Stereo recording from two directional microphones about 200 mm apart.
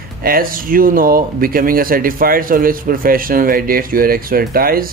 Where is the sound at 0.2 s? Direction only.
45° right (ahead or behind).